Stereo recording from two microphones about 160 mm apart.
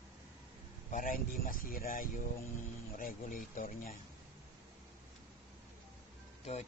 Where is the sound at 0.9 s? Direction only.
60° left (ahead or behind).